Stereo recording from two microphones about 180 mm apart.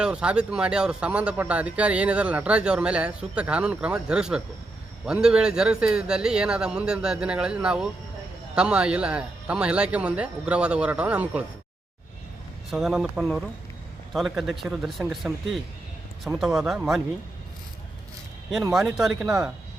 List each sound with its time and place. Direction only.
0.0 s speech: 5° right (ahead or behind)
12.7 s speech: centre (ahead or behind)
18.7 s speech: centre (ahead or behind)